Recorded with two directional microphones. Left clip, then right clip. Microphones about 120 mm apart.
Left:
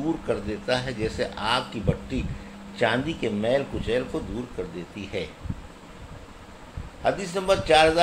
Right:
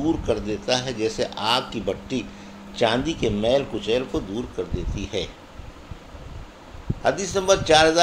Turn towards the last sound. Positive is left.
turn(degrees=-60)  # may be behind; listen again after turning